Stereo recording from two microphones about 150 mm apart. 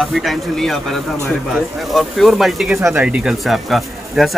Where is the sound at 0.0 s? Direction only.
Centre (ahead or behind).